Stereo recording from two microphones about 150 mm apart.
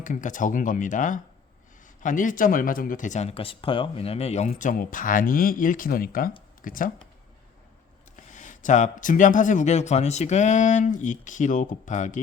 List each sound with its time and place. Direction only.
0.0 s a man's voice: 60° left (ahead or behind)
4.4 s speech: 60° left (ahead or behind)
8.3 s a man's voice: 55° left (ahead or behind)